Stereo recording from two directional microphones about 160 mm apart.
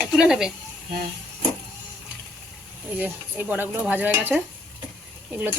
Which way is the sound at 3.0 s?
10° right (ahead or behind).